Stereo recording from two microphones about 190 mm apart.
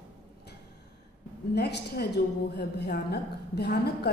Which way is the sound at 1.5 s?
60° left (ahead or behind).